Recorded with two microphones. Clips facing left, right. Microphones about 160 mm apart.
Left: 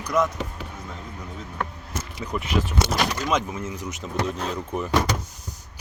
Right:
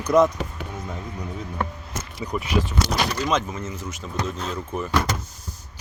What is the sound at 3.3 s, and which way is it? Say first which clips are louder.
Speech: even; 10° left (ahead or behind).